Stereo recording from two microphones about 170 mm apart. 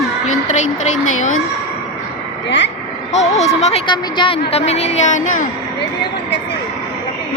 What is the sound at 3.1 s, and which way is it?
A woman's voice, 40° left (ahead or behind).